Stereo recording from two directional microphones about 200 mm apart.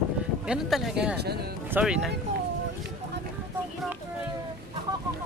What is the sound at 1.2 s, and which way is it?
Speech, 55° right (ahead or behind).